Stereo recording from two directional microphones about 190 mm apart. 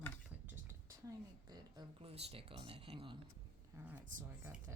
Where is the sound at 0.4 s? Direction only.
10° right (ahead or behind); by 3.2 s 25° right (ahead or behind).